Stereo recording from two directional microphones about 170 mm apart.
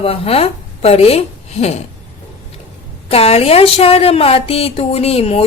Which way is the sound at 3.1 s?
35° left (ahead or behind).